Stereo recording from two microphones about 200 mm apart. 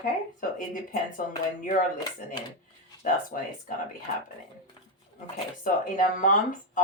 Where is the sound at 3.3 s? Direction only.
45° left (ahead or behind).